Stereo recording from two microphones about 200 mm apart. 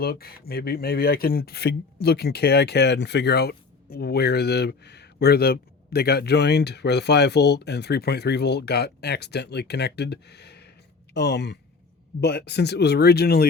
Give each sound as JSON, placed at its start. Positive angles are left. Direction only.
{"t": 0.0, "sound": "speech", "side_deg": 50}